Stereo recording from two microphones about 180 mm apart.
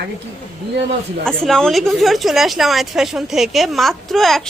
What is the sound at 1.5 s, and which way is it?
Speech, centre (ahead or behind).